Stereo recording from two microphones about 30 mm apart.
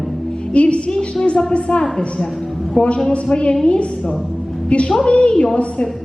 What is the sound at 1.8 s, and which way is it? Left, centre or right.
Speech, left.